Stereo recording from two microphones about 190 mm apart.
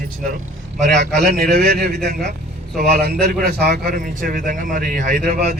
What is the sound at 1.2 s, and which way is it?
A man's voice, 55° right (ahead or behind).